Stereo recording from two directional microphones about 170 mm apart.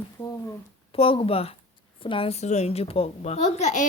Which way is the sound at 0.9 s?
35° left (ahead or behind).